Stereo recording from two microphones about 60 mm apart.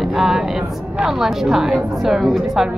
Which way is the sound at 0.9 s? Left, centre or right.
Centre.